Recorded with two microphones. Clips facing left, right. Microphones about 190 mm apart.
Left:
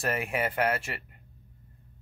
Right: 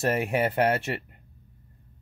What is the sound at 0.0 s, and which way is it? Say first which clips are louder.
Speech: right 5 dB; 30° right (ahead or behind).